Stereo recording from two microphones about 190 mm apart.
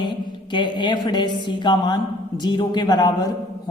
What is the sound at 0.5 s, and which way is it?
A man's voice, 25° left (ahead or behind).